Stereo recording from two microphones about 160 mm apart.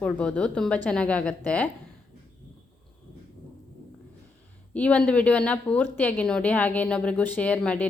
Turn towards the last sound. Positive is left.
turn(degrees=10)  # may be behind; listen again after turning